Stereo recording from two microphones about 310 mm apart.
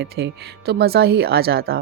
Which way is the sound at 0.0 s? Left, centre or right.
Right.